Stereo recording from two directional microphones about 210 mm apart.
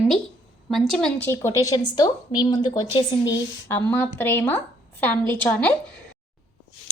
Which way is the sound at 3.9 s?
10° left (ahead or behind).